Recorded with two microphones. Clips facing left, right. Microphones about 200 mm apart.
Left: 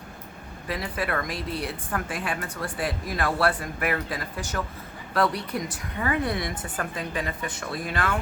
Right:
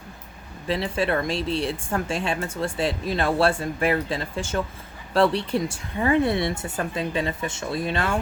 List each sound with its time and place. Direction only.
0.7 s speech: 25° right (ahead or behind)